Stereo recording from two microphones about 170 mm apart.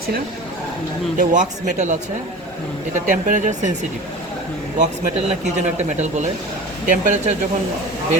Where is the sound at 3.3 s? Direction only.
45° right (ahead or behind).